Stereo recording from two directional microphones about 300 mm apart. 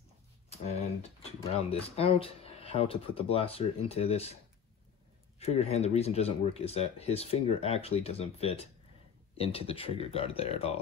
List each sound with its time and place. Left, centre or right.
1.2 s speech: centre
5.4 s speech: left